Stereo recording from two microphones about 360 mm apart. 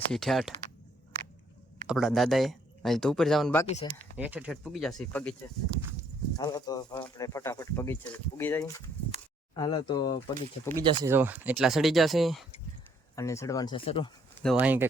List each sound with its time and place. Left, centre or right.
0.1 s speech: centre
1.9 s speech: centre
3.7 s speech: centre
4.2 s speech: centre
6.3 s speech: centre
10.8 s speech: centre
14.4 s speech: centre